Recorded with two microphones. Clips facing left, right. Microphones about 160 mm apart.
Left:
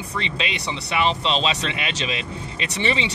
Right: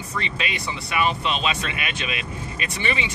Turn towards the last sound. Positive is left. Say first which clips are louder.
# left 3 dB
turn(degrees=25)  # may be behind; listen again after turning